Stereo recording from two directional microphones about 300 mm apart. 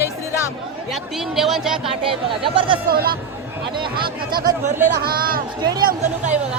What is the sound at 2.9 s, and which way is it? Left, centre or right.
Speech, right.